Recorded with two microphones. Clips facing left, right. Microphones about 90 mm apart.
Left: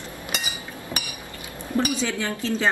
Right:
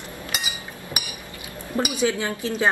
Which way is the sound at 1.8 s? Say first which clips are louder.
Right 1 dB; 15° right (ahead or behind).